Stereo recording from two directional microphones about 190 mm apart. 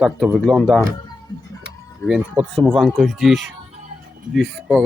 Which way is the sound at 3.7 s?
35° right (ahead or behind).